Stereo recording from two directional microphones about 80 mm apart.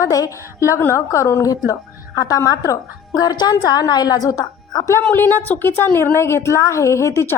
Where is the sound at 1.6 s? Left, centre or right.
Left.